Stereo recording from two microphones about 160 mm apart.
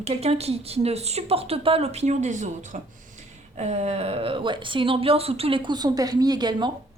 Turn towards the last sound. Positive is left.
turn(degrees=-25)  # may be behind; listen again after turning